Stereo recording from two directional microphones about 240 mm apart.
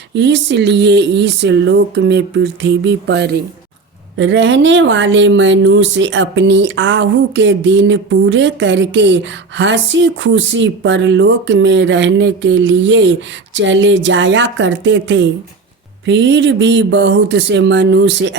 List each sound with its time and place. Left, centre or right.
0.1 s speech: right